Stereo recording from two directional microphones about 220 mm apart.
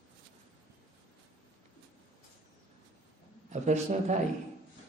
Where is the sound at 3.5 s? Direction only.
30° right (ahead or behind).